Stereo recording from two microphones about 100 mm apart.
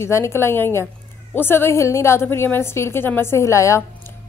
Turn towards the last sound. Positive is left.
turn(degrees=30)  # may be behind; listen again after turning